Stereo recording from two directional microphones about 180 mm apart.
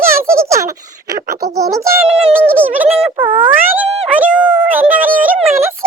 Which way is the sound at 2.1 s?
5° right (ahead or behind).